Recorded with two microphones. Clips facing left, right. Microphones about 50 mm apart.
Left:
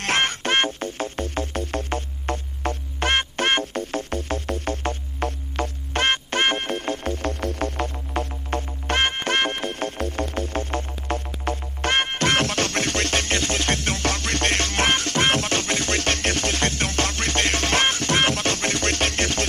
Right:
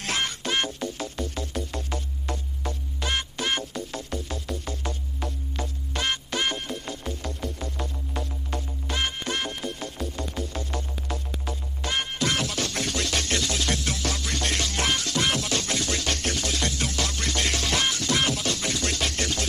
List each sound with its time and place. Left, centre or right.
0.0 s music: left